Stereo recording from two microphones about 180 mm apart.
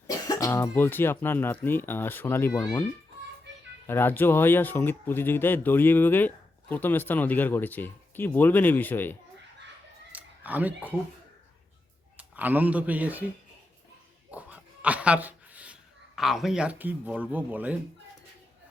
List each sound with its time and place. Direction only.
0.1 s cough: 20° left (ahead or behind)
0.8 s speech: 10° left (ahead or behind)
3.8 s speech: 10° left (ahead or behind)
10.1 s a sound: 10° right (ahead or behind)
12.1 s speech: 10° right (ahead or behind)
14.3 s speech: 5° right (ahead or behind)